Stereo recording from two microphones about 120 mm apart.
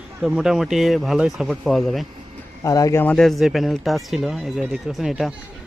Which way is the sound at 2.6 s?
30° left (ahead or behind).